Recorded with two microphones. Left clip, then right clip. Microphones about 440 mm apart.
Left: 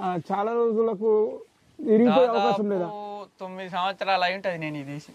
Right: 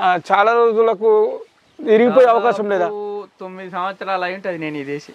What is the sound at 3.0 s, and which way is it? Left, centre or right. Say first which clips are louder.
Speech: right 8 dB; left.